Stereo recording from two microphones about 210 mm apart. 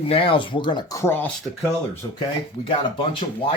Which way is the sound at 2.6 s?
30° left (ahead or behind).